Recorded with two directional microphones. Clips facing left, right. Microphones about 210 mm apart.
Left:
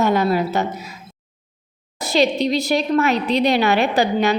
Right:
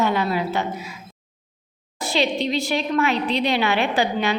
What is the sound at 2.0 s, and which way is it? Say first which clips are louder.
A woman's voice: left 4 dB; 40° left (ahead or behind).